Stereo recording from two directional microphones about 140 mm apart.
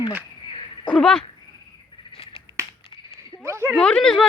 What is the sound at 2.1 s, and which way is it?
Finger snapping, 40° left (ahead or behind).